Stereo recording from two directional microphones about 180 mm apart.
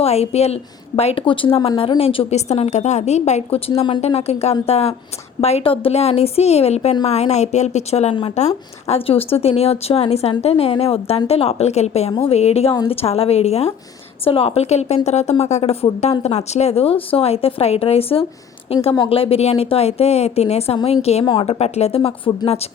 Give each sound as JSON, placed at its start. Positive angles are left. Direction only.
{"t": 0.0, "sound": "a woman's voice", "side_deg": 35}